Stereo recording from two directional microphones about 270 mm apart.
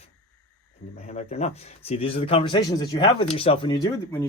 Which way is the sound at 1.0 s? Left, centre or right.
Left.